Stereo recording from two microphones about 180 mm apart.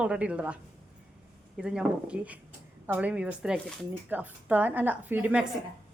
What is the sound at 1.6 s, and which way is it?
A woman's voice, 5° right (ahead or behind).